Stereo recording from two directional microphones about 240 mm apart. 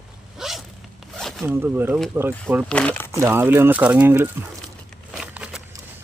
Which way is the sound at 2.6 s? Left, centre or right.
Centre.